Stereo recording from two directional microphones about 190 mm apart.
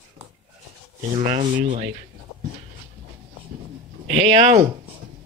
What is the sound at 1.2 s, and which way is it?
Speech, 40° right (ahead or behind).